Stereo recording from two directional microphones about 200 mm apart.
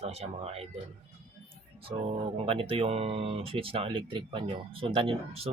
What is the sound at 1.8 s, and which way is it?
Speech, 30° right (ahead or behind).